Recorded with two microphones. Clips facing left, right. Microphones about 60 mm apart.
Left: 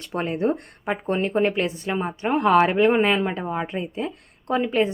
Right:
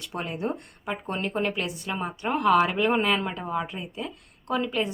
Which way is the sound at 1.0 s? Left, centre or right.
Left.